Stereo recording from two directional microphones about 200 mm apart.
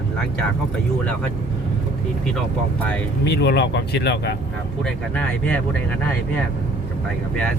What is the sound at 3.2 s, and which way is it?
Speech, 55° left (ahead or behind).